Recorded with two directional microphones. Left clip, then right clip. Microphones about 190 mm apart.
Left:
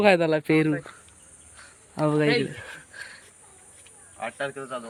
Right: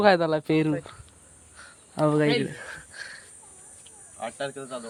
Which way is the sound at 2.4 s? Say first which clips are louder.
Even; centre (ahead or behind).